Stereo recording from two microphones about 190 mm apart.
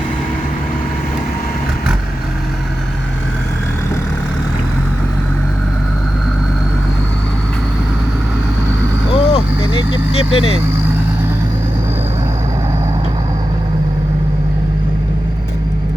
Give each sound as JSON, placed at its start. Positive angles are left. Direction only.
{"t": 9.1, "sound": "vehicle", "side_deg": 30}